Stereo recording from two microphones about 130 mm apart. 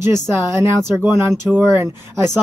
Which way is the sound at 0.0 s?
20° right (ahead or behind).